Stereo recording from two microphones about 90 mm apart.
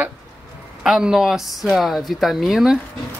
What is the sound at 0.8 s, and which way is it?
Speech, 5° right (ahead or behind).